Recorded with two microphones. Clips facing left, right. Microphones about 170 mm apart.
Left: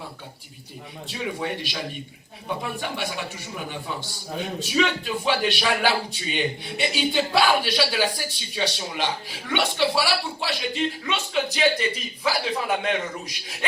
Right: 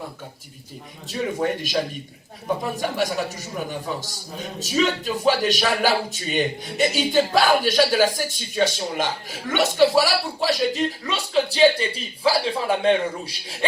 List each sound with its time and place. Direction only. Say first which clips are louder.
1.0 s speech: right 5 dB; 45° right (ahead or behind)